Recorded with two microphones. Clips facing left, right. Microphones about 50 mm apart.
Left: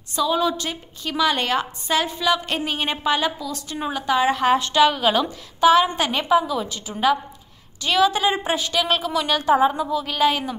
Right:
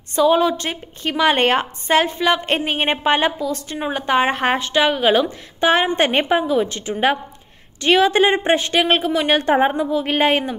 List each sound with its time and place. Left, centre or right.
0.1 s a woman's voice: right
4.6 s a woman's voice: right
5.7 s a woman's voice: right
9.4 s speech: right
9.8 s a woman's voice: right
10.1 s a woman's voice: right